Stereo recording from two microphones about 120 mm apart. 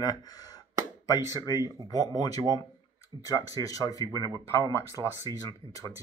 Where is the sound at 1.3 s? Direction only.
30° left (ahead or behind).